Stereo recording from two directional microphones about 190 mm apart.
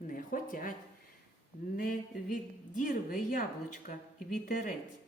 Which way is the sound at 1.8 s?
45° left (ahead or behind).